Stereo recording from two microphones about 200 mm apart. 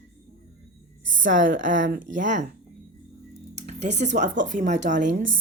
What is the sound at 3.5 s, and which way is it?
Speech, 35° right (ahead or behind).